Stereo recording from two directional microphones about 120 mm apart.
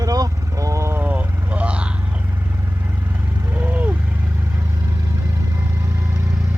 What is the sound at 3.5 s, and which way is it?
Vehicle, 15° right (ahead or behind).